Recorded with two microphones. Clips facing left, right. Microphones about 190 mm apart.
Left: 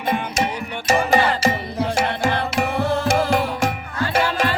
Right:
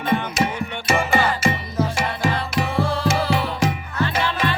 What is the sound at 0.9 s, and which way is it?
Music, 40° left (ahead or behind).